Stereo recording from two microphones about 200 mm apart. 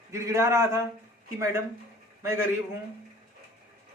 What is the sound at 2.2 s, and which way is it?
Speech, 15° right (ahead or behind).